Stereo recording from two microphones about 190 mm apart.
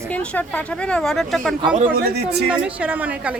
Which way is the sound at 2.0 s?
55° right (ahead or behind).